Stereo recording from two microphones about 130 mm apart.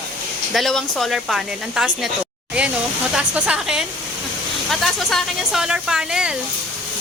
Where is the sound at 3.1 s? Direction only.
10° right (ahead or behind).